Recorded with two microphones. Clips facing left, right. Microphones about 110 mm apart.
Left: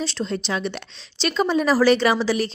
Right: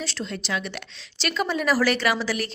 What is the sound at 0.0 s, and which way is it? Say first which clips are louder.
A woman's voice: left 6 dB; 25° left (ahead or behind).